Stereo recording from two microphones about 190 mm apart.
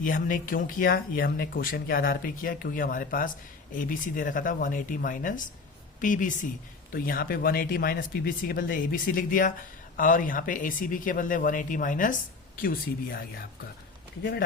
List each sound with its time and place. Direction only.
0.0 s speech: 45° left (ahead or behind)